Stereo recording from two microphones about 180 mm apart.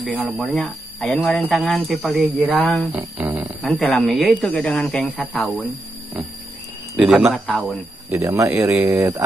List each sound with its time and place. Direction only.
0.0 s speech: centre (ahead or behind)
3.8 s speech: 5° left (ahead or behind)
7.0 s speech: centre (ahead or behind)
8.1 s speech: 15° right (ahead or behind)